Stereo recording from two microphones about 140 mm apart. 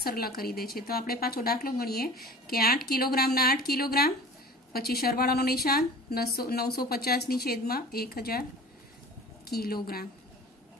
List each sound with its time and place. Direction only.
0.0 s a woman's voice: 90° left
9.5 s a woman's voice: 90° left